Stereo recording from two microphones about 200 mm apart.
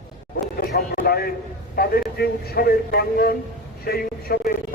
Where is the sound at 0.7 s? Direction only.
50° left (ahead or behind).